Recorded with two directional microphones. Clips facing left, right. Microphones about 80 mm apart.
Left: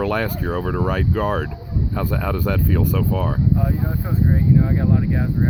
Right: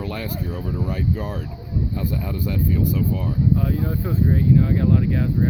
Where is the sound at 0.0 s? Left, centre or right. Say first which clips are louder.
Left 7 dB; left.